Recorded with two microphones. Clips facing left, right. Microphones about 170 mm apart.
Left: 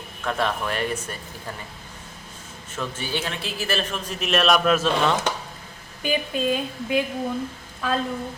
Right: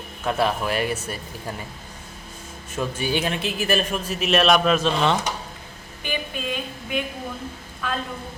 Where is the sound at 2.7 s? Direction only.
10° right (ahead or behind).